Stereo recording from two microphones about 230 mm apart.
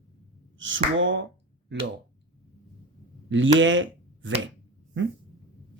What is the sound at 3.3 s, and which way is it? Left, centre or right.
Speech, right.